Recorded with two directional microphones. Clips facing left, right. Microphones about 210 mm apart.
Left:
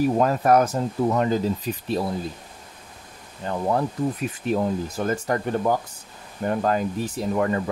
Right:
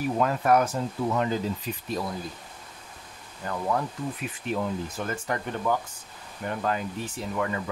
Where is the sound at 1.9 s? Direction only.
30° left (ahead or behind).